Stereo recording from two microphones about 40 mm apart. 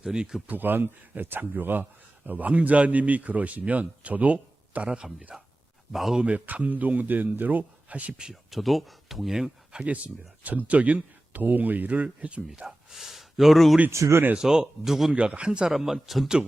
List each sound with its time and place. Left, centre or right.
0.0 s speech: centre
0.4 s speech: right
2.5 s a man's voice: right
5.3 s speech: centre
6.2 s speech: right
8.3 s speech: centre
9.8 s speech: right
11.9 s a man's voice: right
12.6 s speech: centre
15.1 s speech: right
15.7 s speech: centre